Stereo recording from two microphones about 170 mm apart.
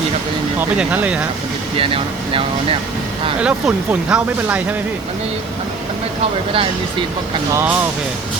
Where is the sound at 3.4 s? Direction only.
5° right (ahead or behind).